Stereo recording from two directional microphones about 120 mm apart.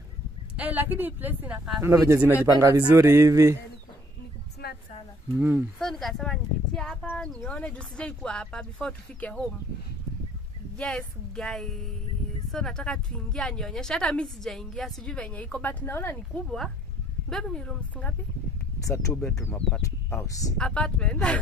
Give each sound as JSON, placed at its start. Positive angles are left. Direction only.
{"t": 0.6, "sound": "speech", "side_deg": -15}
{"t": 5.4, "sound": "speech", "side_deg": -15}
{"t": 5.8, "sound": "a woman's voice", "side_deg": 0}
{"t": 10.8, "sound": "a woman's voice", "side_deg": 5}
{"t": 16.4, "sound": "a woman's voice", "side_deg": 5}
{"t": 18.8, "sound": "speech", "side_deg": 30}
{"t": 19.4, "sound": "speech", "side_deg": 15}
{"t": 19.8, "sound": "speech", "side_deg": 25}
{"t": 20.5, "sound": "speech", "side_deg": 5}